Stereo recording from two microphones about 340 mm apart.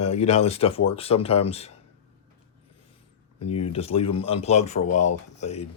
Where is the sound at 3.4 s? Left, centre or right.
Centre.